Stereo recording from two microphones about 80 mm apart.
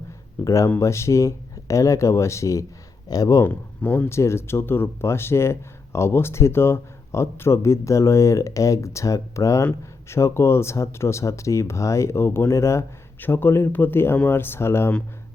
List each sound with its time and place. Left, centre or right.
0.4 s speech: left
3.4 s speech: left
4.1 s speech: left
13.1 s speech: left